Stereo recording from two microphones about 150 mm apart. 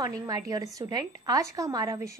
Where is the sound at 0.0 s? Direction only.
25° right (ahead or behind).